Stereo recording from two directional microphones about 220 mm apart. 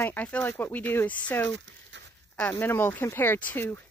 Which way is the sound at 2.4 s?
5° left (ahead or behind).